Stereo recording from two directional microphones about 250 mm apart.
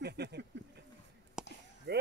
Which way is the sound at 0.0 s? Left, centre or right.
Right.